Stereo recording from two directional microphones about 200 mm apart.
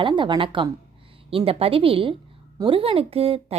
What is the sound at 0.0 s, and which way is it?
A woman's voice, 25° right (ahead or behind).